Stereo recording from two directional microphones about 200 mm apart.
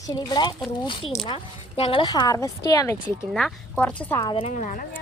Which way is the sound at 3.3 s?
5° left (ahead or behind).